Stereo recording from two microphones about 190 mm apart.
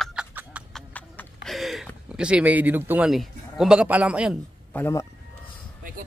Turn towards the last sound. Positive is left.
turn(degrees=15)  # may be behind; listen again after turning